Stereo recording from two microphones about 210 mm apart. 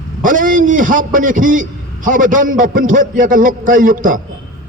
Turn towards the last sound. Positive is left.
turn(degrees=-40)  # may be behind; listen again after turning